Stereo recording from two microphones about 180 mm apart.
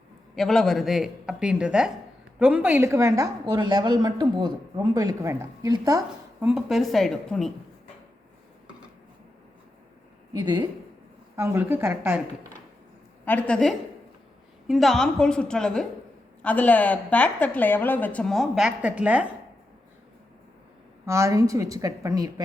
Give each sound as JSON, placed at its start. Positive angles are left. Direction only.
{"t": 0.3, "sound": "a woman's voice", "side_deg": 0}
{"t": 6.4, "sound": "speech", "side_deg": -5}
{"t": 10.3, "sound": "a woman's voice", "side_deg": -25}
{"t": 13.2, "sound": "a woman's voice", "side_deg": 10}
{"t": 21.1, "sound": "a woman's voice", "side_deg": -15}